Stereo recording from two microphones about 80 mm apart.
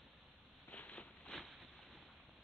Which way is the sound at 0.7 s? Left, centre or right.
Left.